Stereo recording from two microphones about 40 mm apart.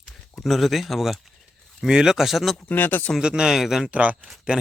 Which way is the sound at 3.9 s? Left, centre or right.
Right.